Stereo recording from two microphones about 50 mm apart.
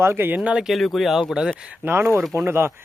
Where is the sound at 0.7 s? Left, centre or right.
Centre.